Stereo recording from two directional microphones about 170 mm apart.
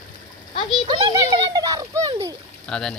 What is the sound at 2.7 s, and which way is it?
Speech, 5° left (ahead or behind).